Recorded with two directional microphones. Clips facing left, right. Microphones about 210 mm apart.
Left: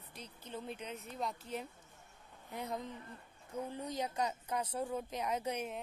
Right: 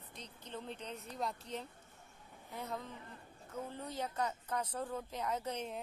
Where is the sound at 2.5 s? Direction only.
15° left (ahead or behind).